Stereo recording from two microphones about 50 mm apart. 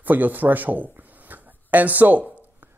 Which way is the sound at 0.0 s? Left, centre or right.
Right.